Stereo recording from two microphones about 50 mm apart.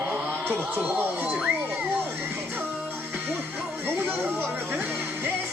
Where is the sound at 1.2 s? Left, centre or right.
Right.